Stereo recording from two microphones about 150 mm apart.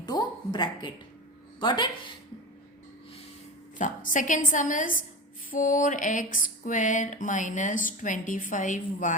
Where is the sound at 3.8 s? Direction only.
60° left (ahead or behind).